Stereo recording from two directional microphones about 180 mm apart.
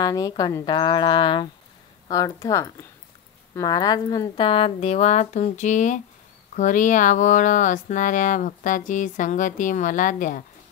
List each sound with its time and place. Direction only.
0.0 s a woman's voice: 20° left (ahead or behind); by 10.4 s 45° left (ahead or behind)